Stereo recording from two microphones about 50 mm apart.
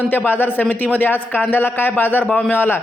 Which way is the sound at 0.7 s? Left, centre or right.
Left.